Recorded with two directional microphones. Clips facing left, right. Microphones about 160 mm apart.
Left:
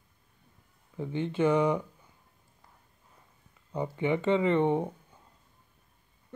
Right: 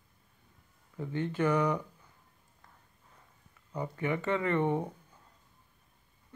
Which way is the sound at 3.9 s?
25° left (ahead or behind).